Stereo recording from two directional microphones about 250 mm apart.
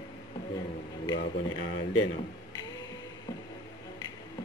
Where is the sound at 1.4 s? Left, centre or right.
Left.